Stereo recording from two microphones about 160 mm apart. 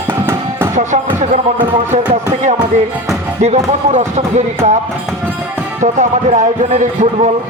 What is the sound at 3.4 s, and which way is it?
A man's voice, 45° right (ahead or behind).